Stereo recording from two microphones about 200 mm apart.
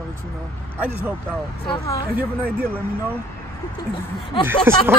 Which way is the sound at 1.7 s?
25° left (ahead or behind).